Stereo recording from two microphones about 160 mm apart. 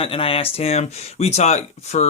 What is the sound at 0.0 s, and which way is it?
Speech, 35° left (ahead or behind).